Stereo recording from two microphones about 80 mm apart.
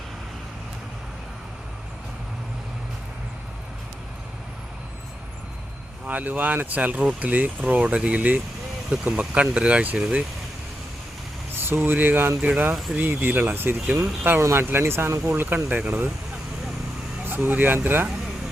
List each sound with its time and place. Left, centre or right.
6.1 s speech: right
11.6 s speech: right
15.3 s speech: right
17.2 s speech: right